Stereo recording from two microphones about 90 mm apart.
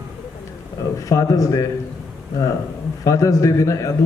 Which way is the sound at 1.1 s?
35° left (ahead or behind).